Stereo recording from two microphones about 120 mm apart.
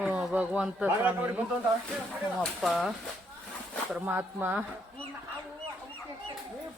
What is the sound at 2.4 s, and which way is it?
Speech, centre (ahead or behind).